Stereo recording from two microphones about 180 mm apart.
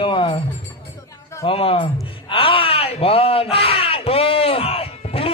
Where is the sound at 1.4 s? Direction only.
30° left (ahead or behind).